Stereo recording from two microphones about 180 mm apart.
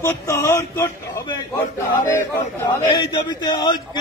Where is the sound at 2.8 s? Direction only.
25° left (ahead or behind).